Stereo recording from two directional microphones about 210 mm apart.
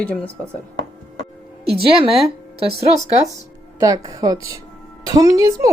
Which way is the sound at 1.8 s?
25° right (ahead or behind).